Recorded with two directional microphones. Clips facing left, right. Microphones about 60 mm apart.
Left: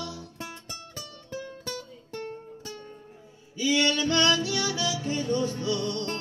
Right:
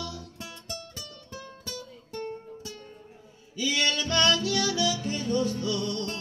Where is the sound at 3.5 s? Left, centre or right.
Left.